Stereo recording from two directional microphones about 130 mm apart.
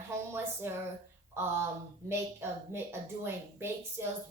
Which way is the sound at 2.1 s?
20° right (ahead or behind).